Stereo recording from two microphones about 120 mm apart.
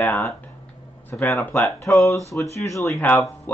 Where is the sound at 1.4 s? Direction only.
20° left (ahead or behind).